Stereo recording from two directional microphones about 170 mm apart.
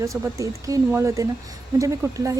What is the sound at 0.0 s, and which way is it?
Speech, 20° right (ahead or behind).